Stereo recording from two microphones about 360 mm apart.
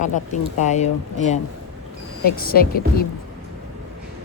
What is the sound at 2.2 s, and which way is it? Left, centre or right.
Speech, left.